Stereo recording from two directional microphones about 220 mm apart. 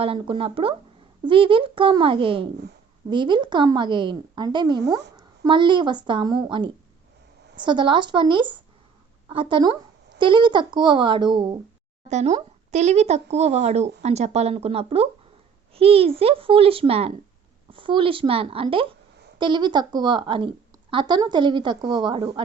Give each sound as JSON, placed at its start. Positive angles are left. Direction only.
{"t": 0.0, "sound": "a woman's voice", "side_deg": -25}
{"t": 12.0, "sound": "a child's voice", "side_deg": -30}